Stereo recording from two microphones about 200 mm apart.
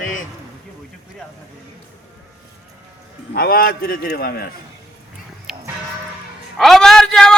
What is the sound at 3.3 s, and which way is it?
A man's voice, 50° left (ahead or behind).